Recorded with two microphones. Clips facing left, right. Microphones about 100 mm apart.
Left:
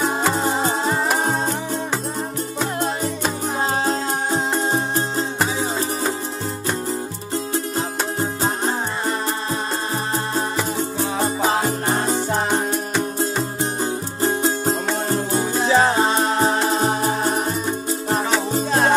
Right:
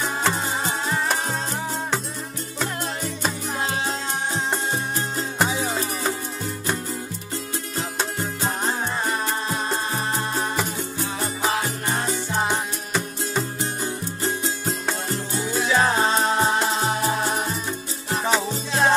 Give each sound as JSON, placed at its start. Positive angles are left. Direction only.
{"t": 0.4, "sound": "music", "side_deg": 35}
{"t": 3.8, "sound": "music", "side_deg": 40}
{"t": 7.3, "sound": "music", "side_deg": 30}
{"t": 11.1, "sound": "music", "side_deg": 35}
{"t": 11.9, "sound": "music", "side_deg": 50}
{"t": 13.4, "sound": "music", "side_deg": 25}
{"t": 13.8, "sound": "music", "side_deg": 35}
{"t": 15.0, "sound": "music", "side_deg": 45}
{"t": 16.3, "sound": "music", "side_deg": 45}